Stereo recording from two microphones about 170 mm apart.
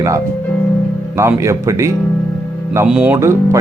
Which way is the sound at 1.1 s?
15° right (ahead or behind).